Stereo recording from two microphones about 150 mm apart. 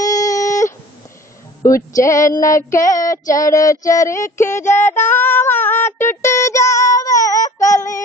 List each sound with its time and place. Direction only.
0.0 s a sound: 25° left (ahead or behind)
1.6 s female singing: 20° left (ahead or behind)
5.0 s child singing: 15° left (ahead or behind)